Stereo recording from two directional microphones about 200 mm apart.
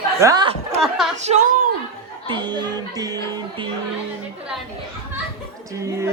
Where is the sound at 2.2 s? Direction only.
20° right (ahead or behind).